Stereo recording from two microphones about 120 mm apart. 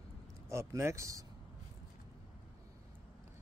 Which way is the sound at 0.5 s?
25° right (ahead or behind).